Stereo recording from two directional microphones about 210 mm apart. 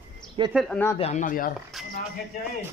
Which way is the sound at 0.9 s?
30° left (ahead or behind).